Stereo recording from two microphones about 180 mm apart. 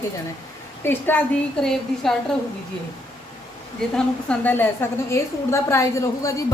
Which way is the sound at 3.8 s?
5° left (ahead or behind).